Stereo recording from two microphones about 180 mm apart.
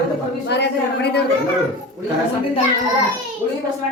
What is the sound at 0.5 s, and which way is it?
Speech, 70° left (ahead or behind).